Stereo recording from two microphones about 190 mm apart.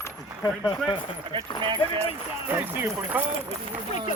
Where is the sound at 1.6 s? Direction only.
25° right (ahead or behind).